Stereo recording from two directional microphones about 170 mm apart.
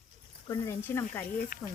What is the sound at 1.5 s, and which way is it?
Speech, 55° left (ahead or behind).